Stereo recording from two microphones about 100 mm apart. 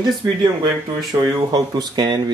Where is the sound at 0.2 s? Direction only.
50° right (ahead or behind).